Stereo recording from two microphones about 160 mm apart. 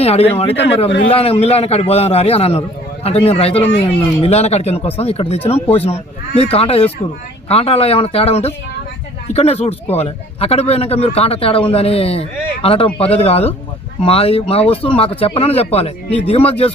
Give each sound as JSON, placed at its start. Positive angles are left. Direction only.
{"t": 0.0, "sound": "a man's voice", "side_deg": 40}